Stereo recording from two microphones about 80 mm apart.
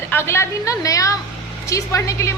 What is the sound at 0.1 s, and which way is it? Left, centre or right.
A woman's voice, left.